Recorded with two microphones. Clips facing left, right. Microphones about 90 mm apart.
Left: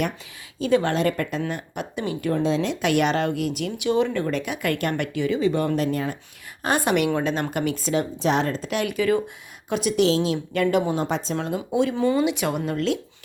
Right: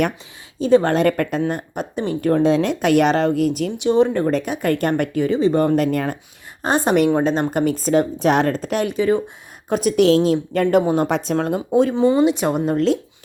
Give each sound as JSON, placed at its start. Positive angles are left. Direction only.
{"t": 0.6, "sound": "speech", "side_deg": -35}
{"t": 1.4, "sound": "speech", "side_deg": -40}
{"t": 3.8, "sound": "speech", "side_deg": -30}
{"t": 6.6, "sound": "speech", "side_deg": -25}
{"t": 8.9, "sound": "speech", "side_deg": -25}
{"t": 9.6, "sound": "speech", "side_deg": -40}
{"t": 9.9, "sound": "speech", "side_deg": -55}
{"t": 11.0, "sound": "speech", "side_deg": -60}
{"t": 11.3, "sound": "speech", "side_deg": -45}